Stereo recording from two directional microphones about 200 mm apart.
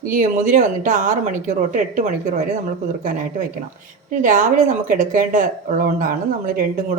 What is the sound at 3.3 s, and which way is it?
Speech, 40° right (ahead or behind).